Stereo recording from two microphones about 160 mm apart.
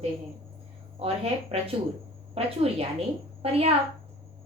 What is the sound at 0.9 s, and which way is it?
A woman's voice, 40° right (ahead or behind).